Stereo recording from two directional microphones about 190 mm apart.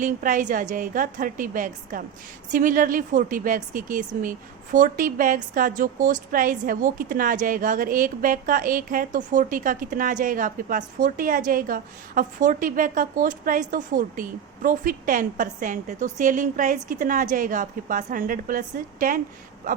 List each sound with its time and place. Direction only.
0.0 s a woman's voice: 45° right (ahead or behind)